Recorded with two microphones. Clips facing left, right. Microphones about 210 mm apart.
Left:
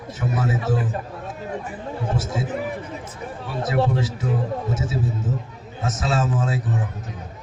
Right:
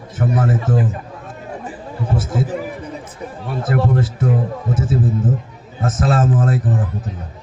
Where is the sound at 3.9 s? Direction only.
55° right (ahead or behind).